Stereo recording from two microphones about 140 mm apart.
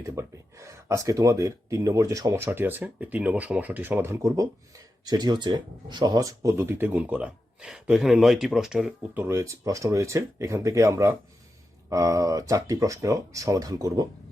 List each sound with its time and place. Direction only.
0.0 s speech: 20° right (ahead or behind); by 9.2 s 5° right (ahead or behind)
9.2 s speech: 20° right (ahead or behind)